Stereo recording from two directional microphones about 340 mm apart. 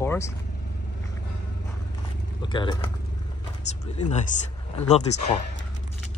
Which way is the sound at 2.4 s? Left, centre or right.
Centre.